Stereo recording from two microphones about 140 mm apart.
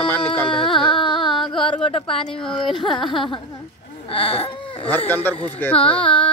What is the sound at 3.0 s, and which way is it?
Speech, 35° left (ahead or behind).